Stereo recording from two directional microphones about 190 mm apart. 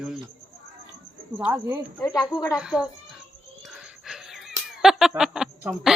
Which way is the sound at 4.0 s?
Centre (ahead or behind).